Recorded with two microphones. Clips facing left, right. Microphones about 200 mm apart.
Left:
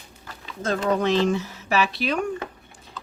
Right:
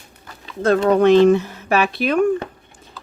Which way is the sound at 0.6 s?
65° right (ahead or behind).